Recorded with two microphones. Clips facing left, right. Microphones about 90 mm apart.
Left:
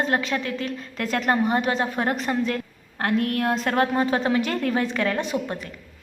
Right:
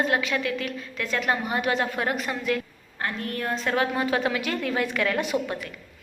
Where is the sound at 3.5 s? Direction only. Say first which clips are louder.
Even; 45° left (ahead or behind).